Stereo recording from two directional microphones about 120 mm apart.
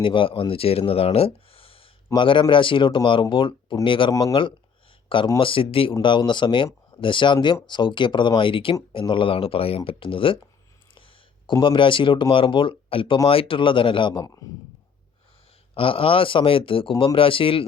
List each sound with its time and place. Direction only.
0.0 s speech: 45° left (ahead or behind)
11.6 s speech: 45° left (ahead or behind)
15.7 s speech: 50° left (ahead or behind)